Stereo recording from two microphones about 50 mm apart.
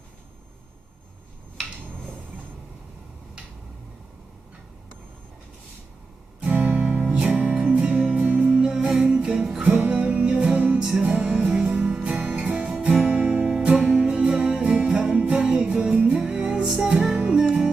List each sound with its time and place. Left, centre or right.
6.4 s guitar: right
7.0 s music: centre
9.6 s music: right
13.1 s guitar: right
13.5 s music: centre